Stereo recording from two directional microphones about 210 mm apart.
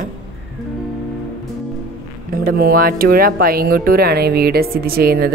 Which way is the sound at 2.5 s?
45° right (ahead or behind).